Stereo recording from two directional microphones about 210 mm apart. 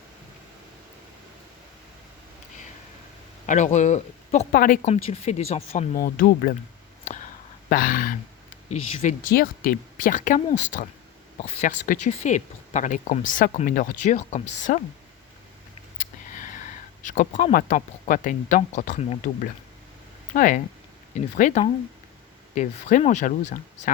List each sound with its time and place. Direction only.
3.4 s speech: 35° left (ahead or behind)
5.0 s speech: 30° left (ahead or behind)
7.0 s a sound: 35° left (ahead or behind)
7.7 s speech: 40° left (ahead or behind)
16.0 s speech: 40° left (ahead or behind)